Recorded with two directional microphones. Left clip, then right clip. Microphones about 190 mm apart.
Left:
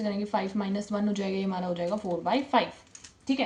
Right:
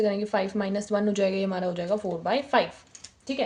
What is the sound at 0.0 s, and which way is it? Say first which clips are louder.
Speech: right 5 dB; 45° right (ahead or behind).